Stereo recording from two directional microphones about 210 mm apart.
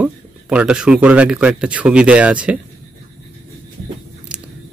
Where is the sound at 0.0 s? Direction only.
5° right (ahead or behind).